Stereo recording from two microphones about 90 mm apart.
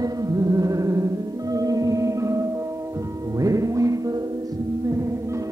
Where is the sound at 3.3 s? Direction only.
40° right (ahead or behind).